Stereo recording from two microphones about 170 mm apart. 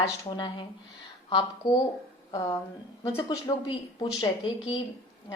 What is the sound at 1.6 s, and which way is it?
Speech, 25° left (ahead or behind).